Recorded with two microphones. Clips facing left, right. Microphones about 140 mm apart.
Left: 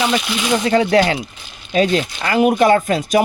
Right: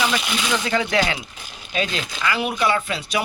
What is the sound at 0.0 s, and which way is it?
Speech, 30° left (ahead or behind).